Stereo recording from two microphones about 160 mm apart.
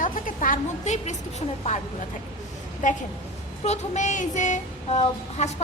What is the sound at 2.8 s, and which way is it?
Speech, 50° left (ahead or behind).